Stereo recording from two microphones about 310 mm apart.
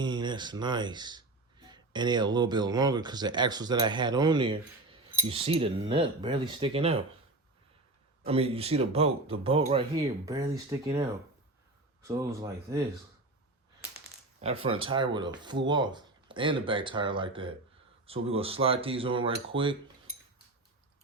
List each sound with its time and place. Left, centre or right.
0.0 s speech: centre
8.2 s a man's voice: centre
12.0 s speech: centre
14.4 s speech: centre